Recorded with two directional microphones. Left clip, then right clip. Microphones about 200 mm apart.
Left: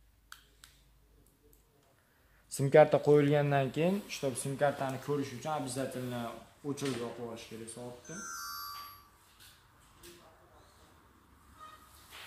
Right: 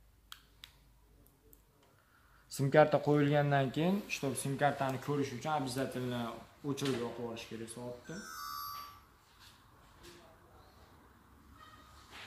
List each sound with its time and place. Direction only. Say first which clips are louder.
2.5 s speech: left 3 dB; 30° left (ahead or behind)
4.2 s a man's voice: left 2 dB; 10° left (ahead or behind)